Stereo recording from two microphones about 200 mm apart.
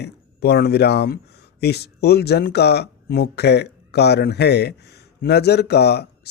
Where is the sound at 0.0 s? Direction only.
55° left (ahead or behind).